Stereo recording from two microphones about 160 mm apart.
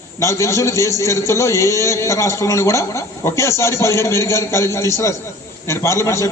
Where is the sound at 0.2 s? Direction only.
20° left (ahead or behind).